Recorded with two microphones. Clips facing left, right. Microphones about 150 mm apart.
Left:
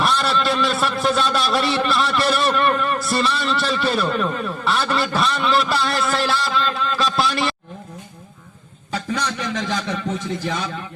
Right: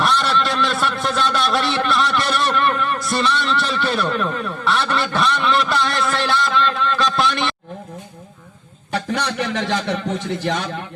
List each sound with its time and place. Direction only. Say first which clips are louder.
0.0 s a man's voice: right 1 dB; centre (ahead or behind)
8.9 s a man's voice: right 2 dB; 75° right (ahead or behind)